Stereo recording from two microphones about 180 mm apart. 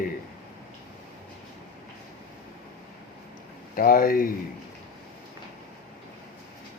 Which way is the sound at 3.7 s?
50° left (ahead or behind).